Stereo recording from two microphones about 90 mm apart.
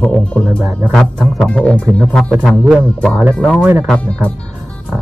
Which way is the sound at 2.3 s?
5° right (ahead or behind).